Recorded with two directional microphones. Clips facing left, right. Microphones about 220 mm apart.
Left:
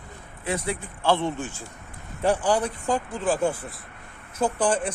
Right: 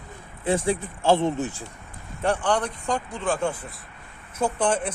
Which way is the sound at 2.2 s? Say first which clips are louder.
Left 1 dB; 5° left (ahead or behind).